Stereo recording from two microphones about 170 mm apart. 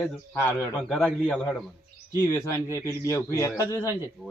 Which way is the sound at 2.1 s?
20° left (ahead or behind).